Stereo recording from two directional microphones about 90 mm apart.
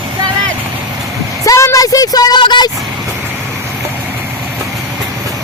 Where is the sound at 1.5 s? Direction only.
35° left (ahead or behind); by 2.6 s 55° left (ahead or behind).